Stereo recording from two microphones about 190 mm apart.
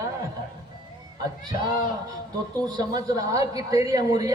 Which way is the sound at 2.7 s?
20° right (ahead or behind).